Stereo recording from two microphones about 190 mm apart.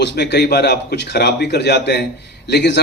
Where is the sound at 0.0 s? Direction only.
65° left (ahead or behind).